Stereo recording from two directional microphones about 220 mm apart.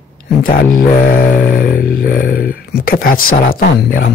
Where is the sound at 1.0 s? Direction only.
40° left (ahead or behind).